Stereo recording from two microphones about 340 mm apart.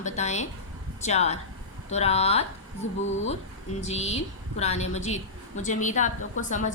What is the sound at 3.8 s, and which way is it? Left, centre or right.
A woman's voice, centre.